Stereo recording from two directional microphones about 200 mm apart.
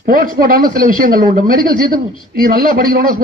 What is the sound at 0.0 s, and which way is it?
Speech, 45° right (ahead or behind).